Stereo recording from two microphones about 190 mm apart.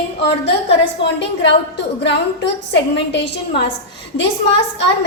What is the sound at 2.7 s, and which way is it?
Speech, 65° left (ahead or behind).